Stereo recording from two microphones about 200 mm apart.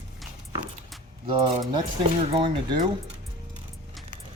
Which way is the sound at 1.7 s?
25° right (ahead or behind).